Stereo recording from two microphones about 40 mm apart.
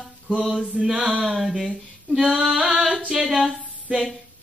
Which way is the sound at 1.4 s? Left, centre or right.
Centre.